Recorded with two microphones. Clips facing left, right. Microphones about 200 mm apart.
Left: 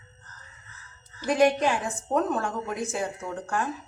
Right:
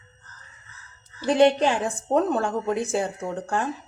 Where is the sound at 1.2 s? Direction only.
30° right (ahead or behind).